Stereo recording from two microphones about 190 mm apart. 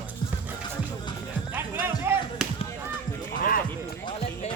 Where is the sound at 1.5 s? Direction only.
10° right (ahead or behind).